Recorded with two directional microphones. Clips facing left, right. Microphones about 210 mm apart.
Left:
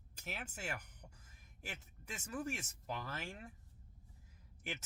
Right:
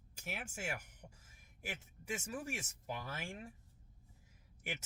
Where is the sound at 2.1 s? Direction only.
10° right (ahead or behind).